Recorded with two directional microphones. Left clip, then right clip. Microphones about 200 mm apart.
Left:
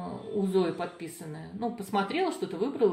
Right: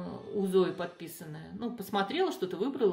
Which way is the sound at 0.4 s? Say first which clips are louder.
Even; 40° right (ahead or behind).